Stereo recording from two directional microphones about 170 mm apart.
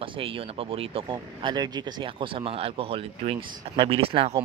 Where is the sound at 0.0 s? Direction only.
35° right (ahead or behind).